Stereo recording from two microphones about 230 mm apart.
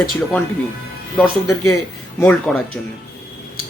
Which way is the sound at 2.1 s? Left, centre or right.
Centre.